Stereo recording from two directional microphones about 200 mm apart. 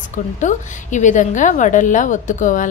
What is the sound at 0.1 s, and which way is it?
A woman's voice, 40° left (ahead or behind).